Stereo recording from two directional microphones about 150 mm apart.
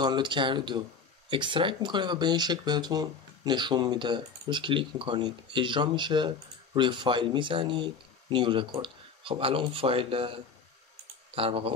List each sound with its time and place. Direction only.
0.0 s speech: 30° right (ahead or behind)
11.3 s speech: 40° right (ahead or behind)